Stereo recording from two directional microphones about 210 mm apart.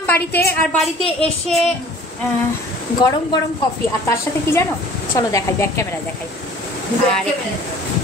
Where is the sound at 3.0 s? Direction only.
20° left (ahead or behind).